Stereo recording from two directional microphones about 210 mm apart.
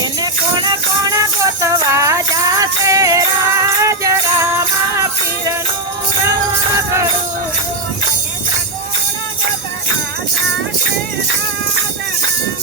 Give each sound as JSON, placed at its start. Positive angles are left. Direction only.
{"t": 0.0, "sound": "music", "side_deg": -20}